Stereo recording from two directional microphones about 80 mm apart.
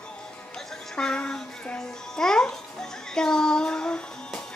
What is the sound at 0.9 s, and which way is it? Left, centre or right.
Babbling, centre.